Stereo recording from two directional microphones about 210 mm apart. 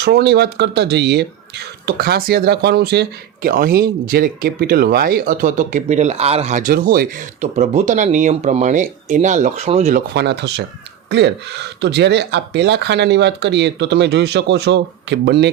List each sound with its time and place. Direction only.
0.0 s speech: 50° right (ahead or behind); by 10.0 s 35° right (ahead or behind)
10.2 s speech: 55° right (ahead or behind)